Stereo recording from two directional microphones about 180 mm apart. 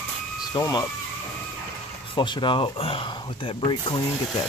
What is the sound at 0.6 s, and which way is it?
Speech, 20° left (ahead or behind).